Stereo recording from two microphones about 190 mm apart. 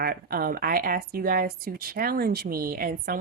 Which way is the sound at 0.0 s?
50° right (ahead or behind).